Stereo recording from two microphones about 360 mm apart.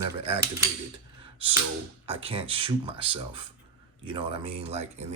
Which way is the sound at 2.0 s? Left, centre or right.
Centre.